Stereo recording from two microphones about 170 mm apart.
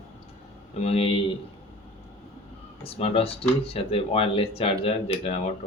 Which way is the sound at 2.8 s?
35° left (ahead or behind).